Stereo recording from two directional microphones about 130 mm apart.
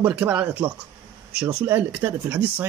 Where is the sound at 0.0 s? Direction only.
15° right (ahead or behind).